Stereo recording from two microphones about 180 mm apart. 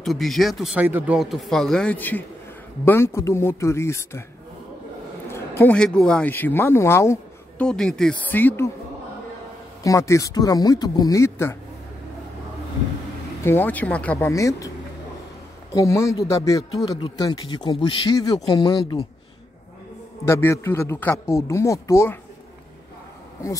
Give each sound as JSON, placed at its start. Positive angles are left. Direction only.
{"t": 0.0, "sound": "speech", "side_deg": 0}
{"t": 5.3, "sound": "speech", "side_deg": 10}
{"t": 9.8, "sound": "a man's voice", "side_deg": 15}
{"t": 13.4, "sound": "speech", "side_deg": 10}
{"t": 15.7, "sound": "a man's voice", "side_deg": 15}
{"t": 20.2, "sound": "speech", "side_deg": 15}